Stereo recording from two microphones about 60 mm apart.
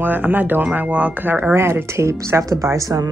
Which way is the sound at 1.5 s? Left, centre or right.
Right.